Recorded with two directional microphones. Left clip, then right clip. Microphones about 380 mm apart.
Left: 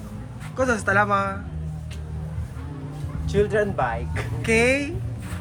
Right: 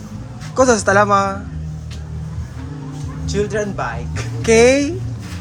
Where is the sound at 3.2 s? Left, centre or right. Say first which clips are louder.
Right 1 dB; centre.